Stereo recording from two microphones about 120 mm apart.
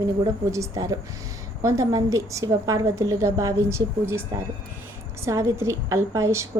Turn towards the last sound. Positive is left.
turn(degrees=-25)  # may be behind; listen again after turning